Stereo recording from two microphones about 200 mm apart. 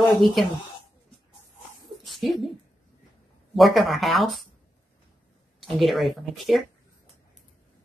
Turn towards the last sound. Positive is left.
turn(degrees=0)  # may be behind; listen again after turning